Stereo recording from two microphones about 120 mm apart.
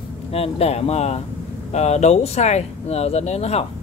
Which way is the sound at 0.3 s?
55° left (ahead or behind).